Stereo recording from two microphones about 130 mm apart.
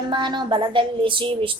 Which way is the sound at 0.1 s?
35° right (ahead or behind).